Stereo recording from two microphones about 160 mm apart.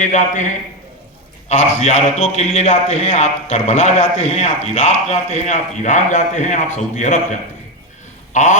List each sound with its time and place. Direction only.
0.0 s a man's voice: 50° left (ahead or behind)